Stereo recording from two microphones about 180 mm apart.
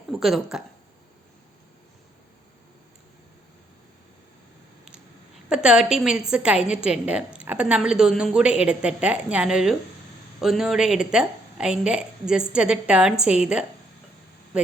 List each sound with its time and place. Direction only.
0.1 s speech: centre (ahead or behind)
5.5 s a woman's voice: 5° right (ahead or behind)